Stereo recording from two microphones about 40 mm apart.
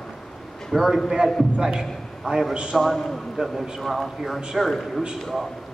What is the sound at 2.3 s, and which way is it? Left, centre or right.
Speech, right.